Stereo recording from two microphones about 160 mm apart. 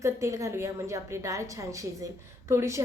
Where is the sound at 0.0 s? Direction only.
20° right (ahead or behind).